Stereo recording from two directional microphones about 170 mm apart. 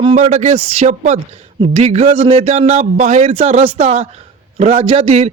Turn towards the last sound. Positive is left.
turn(degrees=-40)  # may be behind; listen again after turning